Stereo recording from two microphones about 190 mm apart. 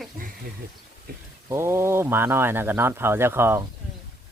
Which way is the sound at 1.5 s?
15° right (ahead or behind).